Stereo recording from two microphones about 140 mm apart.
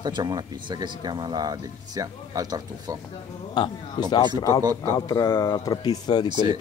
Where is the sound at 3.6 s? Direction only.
30° left (ahead or behind).